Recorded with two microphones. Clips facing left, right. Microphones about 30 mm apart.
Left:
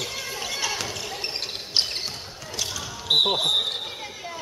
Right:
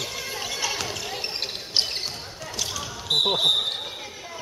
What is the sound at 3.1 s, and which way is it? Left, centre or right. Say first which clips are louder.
Basketball bounce: left 3 dB; centre.